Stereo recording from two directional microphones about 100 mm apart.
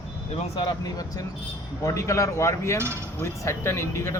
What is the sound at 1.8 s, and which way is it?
Speech, 30° left (ahead or behind).